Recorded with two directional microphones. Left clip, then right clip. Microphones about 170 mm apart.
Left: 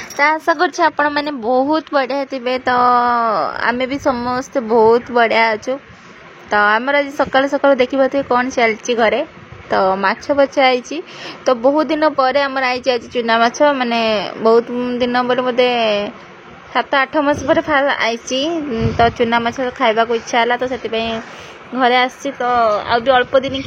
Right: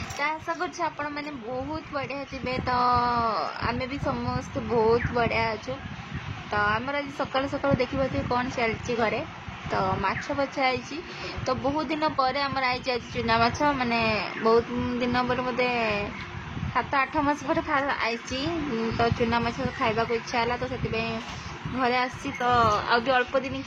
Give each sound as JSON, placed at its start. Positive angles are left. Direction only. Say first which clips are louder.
{"t": 0.2, "sound": "a woman's voice", "louder": "left 15 dB", "side_deg": 50}